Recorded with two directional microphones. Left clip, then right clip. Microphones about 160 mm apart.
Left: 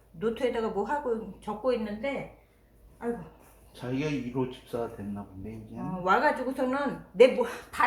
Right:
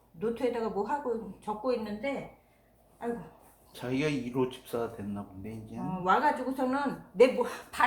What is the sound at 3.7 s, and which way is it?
A woman's voice, centre (ahead or behind).